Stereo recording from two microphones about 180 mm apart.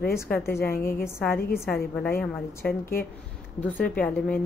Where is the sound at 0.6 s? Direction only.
55° left (ahead or behind).